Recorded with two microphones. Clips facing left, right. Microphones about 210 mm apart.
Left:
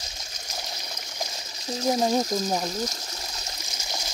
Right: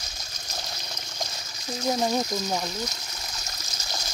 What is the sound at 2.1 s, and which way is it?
Speech, 40° left (ahead or behind).